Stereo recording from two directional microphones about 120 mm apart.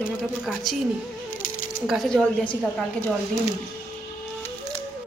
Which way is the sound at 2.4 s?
15° left (ahead or behind).